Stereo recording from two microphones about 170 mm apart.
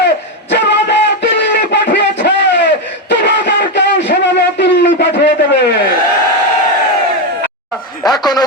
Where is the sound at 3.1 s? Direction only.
90° left.